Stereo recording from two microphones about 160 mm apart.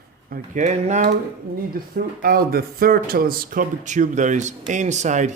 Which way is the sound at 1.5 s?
65° right (ahead or behind).